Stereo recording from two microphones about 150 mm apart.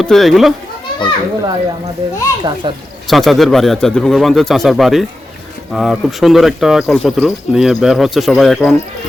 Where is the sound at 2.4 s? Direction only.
30° right (ahead or behind).